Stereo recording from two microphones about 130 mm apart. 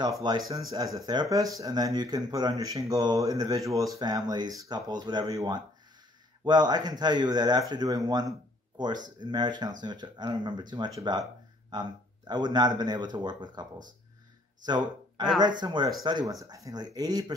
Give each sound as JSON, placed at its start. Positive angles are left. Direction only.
{"t": 0.0, "sound": "speech", "side_deg": -35}
{"t": 6.4, "sound": "speech", "side_deg": -35}
{"t": 14.7, "sound": "speech", "side_deg": -35}